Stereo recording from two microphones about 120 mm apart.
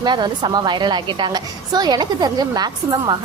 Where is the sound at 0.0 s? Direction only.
40° right (ahead or behind).